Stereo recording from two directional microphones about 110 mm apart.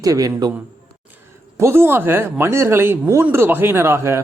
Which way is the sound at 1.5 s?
20° right (ahead or behind).